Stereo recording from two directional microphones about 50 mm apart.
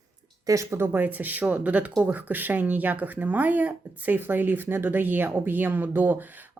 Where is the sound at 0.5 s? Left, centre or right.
Right.